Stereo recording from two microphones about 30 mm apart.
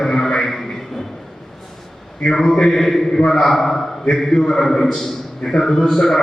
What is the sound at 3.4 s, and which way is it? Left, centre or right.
A man's voice, centre.